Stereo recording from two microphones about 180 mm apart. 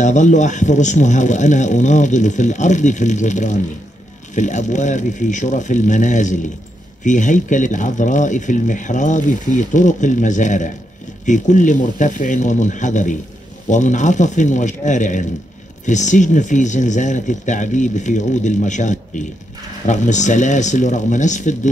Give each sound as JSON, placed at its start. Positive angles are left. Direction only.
{"t": 0.0, "sound": "speech", "side_deg": 40}